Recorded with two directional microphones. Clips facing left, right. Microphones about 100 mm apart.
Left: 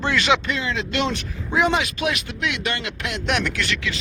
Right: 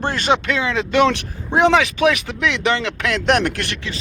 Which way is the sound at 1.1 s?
65° right (ahead or behind).